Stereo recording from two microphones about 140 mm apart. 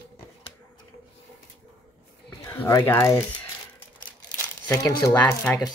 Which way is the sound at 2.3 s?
15° left (ahead or behind).